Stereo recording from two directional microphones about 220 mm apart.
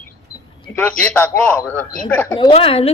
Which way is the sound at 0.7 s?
5° left (ahead or behind).